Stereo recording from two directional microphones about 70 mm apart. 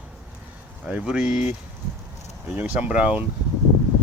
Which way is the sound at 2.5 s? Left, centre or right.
Right.